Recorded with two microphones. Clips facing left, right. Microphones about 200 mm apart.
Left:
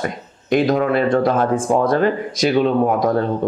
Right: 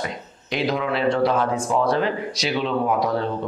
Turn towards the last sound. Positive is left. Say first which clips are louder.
# left 5 dB
turn(degrees=50)  # may be behind; listen again after turning